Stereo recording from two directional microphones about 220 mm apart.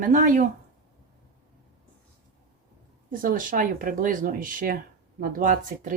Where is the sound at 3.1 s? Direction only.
40° right (ahead or behind).